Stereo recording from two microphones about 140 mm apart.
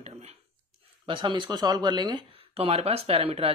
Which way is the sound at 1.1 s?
35° right (ahead or behind).